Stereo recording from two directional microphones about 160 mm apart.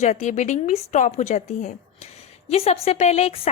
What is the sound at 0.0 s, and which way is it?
A woman's voice, 45° left (ahead or behind).